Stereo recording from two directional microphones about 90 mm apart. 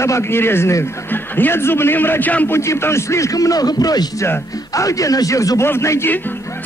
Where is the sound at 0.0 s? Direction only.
30° left (ahead or behind).